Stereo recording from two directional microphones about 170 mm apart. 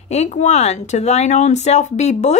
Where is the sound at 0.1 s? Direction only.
40° left (ahead or behind).